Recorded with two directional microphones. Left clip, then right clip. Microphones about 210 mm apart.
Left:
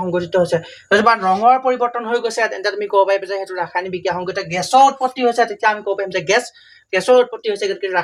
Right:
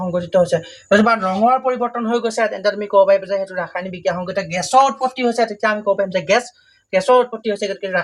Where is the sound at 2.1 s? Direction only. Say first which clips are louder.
Even; 45° left (ahead or behind).